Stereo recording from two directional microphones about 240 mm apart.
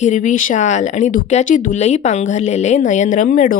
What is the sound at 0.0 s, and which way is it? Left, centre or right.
Speech, left.